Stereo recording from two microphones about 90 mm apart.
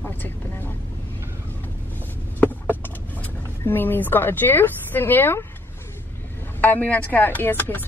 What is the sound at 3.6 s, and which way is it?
A woman's voice, 25° left (ahead or behind).